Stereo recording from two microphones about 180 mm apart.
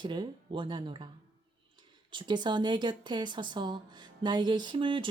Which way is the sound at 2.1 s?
25° right (ahead or behind).